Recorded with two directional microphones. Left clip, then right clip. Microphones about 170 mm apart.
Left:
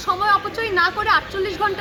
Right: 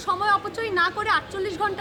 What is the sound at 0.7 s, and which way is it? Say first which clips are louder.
Speech: left 5 dB; 35° right (ahead or behind).